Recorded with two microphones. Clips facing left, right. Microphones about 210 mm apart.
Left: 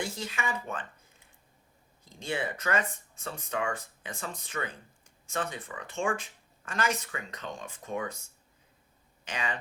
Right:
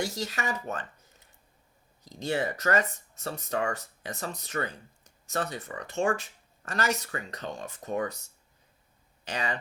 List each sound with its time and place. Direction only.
0.0 s speech: 40° right (ahead or behind)
9.2 s speech: 35° right (ahead or behind)